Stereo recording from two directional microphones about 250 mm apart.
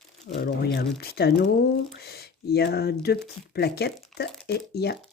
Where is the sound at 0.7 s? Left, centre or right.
Left.